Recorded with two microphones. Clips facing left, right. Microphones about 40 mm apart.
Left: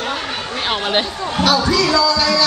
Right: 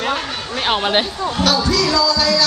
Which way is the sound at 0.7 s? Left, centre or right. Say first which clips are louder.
Right 2 dB; centre.